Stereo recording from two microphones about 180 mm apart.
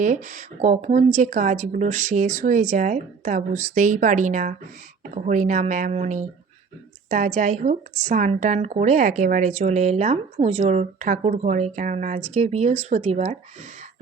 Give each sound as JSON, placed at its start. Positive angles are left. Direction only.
{"t": 0.0, "sound": "speech", "side_deg": -45}